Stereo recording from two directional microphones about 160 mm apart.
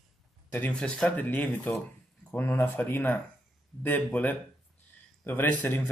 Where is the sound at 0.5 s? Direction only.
10° left (ahead or behind).